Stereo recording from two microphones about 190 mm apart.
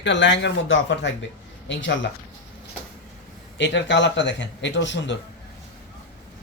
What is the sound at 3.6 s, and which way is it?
Speech, 70° left (ahead or behind).